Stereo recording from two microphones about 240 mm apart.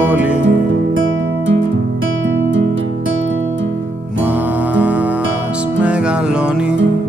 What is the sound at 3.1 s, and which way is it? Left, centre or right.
Music, right.